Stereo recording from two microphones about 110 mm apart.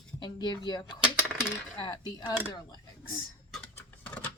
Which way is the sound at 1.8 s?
35° left (ahead or behind).